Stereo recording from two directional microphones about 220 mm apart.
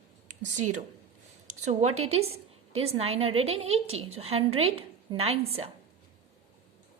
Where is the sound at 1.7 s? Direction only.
30° right (ahead or behind).